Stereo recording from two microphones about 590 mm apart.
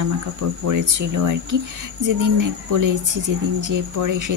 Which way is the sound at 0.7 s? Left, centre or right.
Right.